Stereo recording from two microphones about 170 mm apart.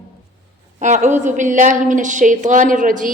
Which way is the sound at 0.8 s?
45° right (ahead or behind).